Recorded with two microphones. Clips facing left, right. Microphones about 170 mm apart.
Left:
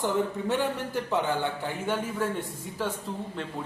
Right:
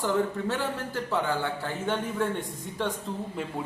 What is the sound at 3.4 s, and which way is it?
Speech, 10° right (ahead or behind).